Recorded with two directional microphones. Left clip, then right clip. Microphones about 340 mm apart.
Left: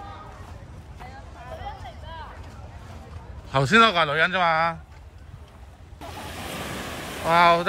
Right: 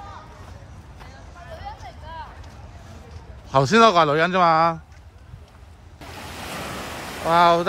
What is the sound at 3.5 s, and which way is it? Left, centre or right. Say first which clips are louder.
A man's voice: right 3 dB; centre.